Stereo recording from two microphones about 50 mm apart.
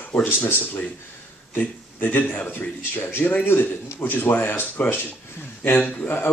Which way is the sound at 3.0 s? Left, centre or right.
Left.